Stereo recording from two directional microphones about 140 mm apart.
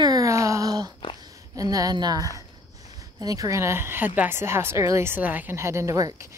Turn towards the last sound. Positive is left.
turn(degrees=-25)  # may be behind; listen again after turning